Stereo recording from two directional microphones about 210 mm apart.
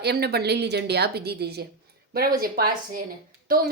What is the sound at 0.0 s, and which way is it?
A woman's voice, 50° right (ahead or behind).